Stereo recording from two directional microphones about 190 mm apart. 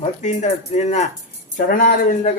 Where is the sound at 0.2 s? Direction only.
35° left (ahead or behind).